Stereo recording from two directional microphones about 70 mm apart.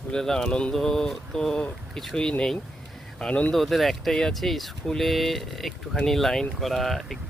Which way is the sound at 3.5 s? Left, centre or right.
Centre.